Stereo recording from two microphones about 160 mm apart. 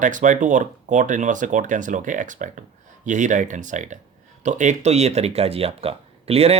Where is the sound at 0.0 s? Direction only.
50° right (ahead or behind).